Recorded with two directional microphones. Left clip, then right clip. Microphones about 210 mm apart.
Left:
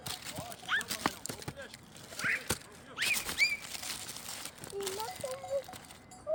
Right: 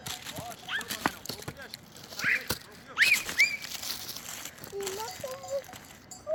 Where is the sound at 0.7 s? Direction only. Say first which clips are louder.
Left 1 dB; 10° left (ahead or behind).